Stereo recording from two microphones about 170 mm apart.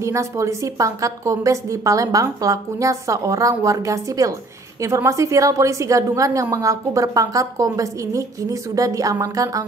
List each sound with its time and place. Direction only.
0.0 s a woman's voice: 15° right (ahead or behind)